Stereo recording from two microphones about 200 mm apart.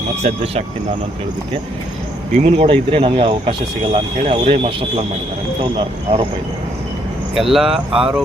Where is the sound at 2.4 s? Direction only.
25° right (ahead or behind).